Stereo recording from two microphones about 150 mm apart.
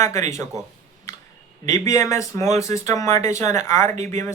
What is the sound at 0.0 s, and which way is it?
Speech, 50° right (ahead or behind).